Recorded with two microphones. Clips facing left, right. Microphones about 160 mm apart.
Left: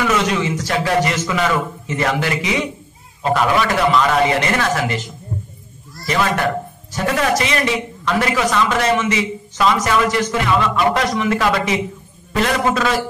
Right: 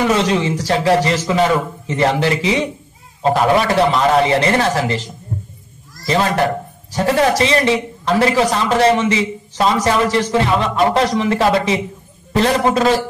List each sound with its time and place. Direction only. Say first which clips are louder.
0.0 s a man's voice: right 3 dB; 30° right (ahead or behind)